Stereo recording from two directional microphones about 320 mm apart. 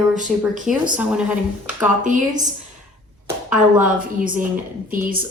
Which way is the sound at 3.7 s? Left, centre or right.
Right.